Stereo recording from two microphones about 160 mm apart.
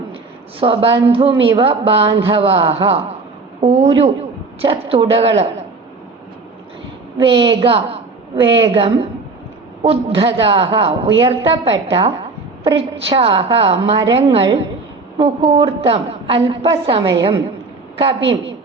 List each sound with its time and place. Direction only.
0.6 s a woman's voice: 35° right (ahead or behind)
7.2 s a woman's voice: 30° right (ahead or behind)